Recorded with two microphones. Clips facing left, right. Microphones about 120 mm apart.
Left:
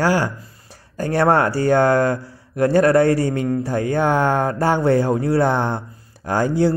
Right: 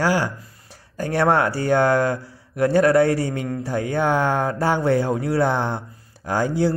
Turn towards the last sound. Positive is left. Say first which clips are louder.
# left 3 dB
turn(degrees=50)  # may be behind; listen again after turning